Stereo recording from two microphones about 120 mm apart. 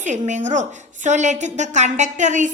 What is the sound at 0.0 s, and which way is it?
A woman's voice, 90° right.